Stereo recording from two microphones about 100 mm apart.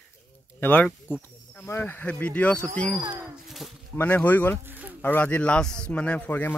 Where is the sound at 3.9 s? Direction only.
15° left (ahead or behind).